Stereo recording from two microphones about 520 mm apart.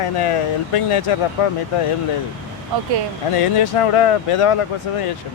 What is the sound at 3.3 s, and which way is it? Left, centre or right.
Speech, left.